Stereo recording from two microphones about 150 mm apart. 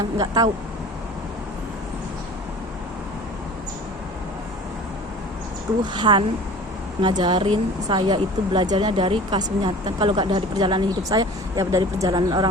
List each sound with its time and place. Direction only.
0.0 s speech: 25° right (ahead or behind)
5.8 s speech: 30° right (ahead or behind)